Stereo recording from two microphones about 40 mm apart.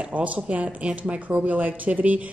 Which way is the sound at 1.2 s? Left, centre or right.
Right.